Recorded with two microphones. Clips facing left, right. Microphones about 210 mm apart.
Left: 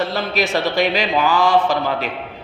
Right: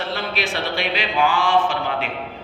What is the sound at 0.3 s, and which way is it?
A man's voice, 40° left (ahead or behind).